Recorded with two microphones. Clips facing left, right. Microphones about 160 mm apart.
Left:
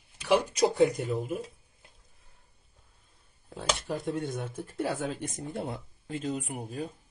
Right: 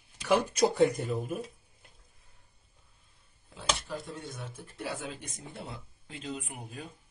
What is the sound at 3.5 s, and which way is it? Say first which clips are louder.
Speech: left 3 dB; 50° left (ahead or behind).